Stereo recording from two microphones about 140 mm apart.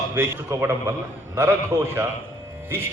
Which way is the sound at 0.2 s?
20° right (ahead or behind).